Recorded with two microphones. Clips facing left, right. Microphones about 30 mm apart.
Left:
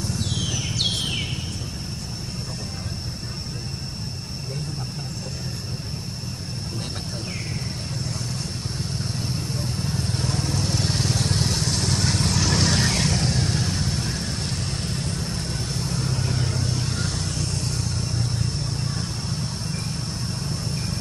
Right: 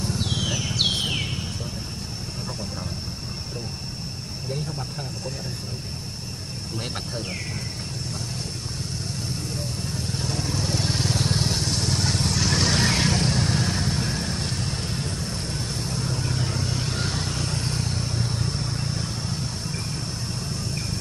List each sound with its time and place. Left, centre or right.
0.2 s a sound: centre
9.8 s vehicle: centre
16.4 s vehicle: centre